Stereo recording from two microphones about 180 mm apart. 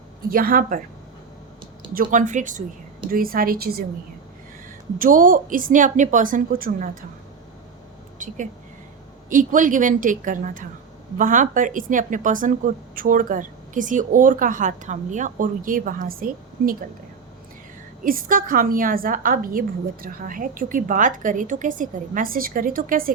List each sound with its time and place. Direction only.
0.3 s speech: 55° right (ahead or behind)
1.9 s speech: 50° right (ahead or behind)
4.9 s speech: 50° right (ahead or behind)
9.3 s speech: 45° right (ahead or behind)
18.0 s speech: 50° right (ahead or behind)